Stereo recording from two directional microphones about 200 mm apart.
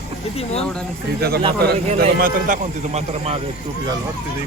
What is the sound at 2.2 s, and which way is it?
A man's voice, 45° right (ahead or behind).